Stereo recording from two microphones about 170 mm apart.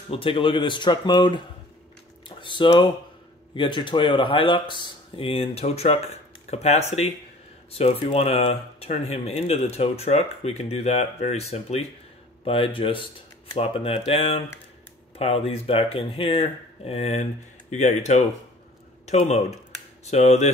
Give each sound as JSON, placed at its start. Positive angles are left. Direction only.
{"t": 0.1, "sound": "speech", "side_deg": 30}
{"t": 2.2, "sound": "typing", "side_deg": 30}
{"t": 3.5, "sound": "speech", "side_deg": 30}